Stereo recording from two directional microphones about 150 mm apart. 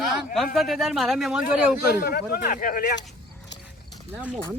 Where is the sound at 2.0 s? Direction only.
75° left (ahead or behind).